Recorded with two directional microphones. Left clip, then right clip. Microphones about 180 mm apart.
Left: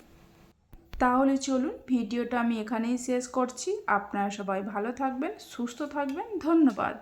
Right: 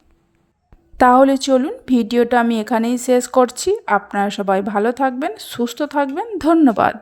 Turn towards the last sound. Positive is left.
turn(degrees=-40)  # may be behind; listen again after turning